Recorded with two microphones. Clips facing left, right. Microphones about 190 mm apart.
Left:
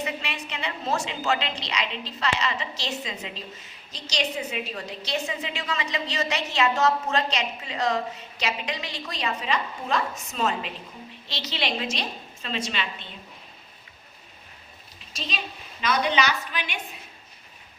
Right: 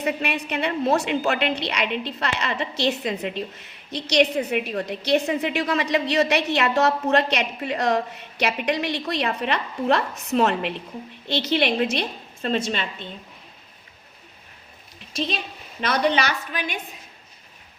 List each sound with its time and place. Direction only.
0.0 s a woman's voice: 60° right (ahead or behind)
15.1 s a woman's voice: 60° right (ahead or behind)